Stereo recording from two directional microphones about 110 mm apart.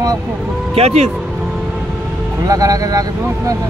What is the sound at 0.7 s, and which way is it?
Speech, 75° right (ahead or behind).